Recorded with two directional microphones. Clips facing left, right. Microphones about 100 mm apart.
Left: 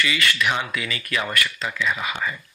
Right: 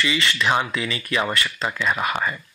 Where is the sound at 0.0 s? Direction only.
25° right (ahead or behind).